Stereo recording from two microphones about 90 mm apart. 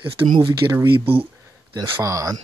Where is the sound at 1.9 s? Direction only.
40° right (ahead or behind).